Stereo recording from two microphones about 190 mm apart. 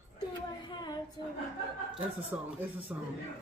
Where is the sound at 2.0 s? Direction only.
10° right (ahead or behind).